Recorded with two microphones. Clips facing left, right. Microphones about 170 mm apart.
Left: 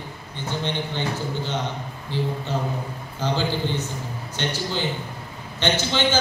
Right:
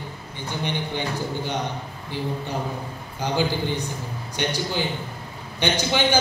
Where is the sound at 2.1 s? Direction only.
15° right (ahead or behind).